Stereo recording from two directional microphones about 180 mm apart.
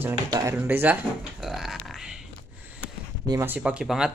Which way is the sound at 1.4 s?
Centre (ahead or behind).